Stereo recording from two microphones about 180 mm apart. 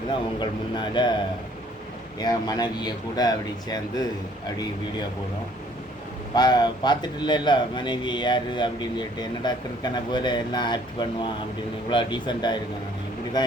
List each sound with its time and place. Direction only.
0.3 s a man's voice: 25° left (ahead or behind)
6.3 s a man's voice: 25° left (ahead or behind)